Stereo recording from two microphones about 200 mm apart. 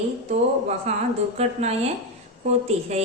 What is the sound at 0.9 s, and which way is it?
Speech, 35° right (ahead or behind).